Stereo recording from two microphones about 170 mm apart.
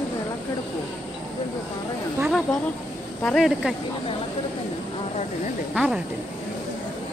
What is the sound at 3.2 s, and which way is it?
Speech, centre (ahead or behind).